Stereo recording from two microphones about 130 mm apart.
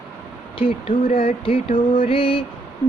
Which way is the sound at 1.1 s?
45° left (ahead or behind).